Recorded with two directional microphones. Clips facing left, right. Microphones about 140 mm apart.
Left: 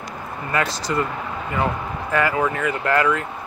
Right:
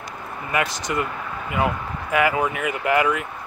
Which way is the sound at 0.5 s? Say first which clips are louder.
Left 1 dB; 15° right (ahead or behind).